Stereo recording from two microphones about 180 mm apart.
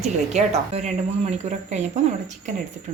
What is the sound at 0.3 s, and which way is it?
Speech, 35° right (ahead or behind).